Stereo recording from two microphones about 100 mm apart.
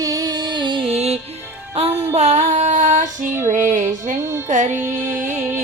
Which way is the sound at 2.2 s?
90° right.